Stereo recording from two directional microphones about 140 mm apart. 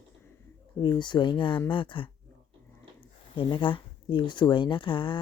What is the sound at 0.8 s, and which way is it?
Speech, 30° left (ahead or behind).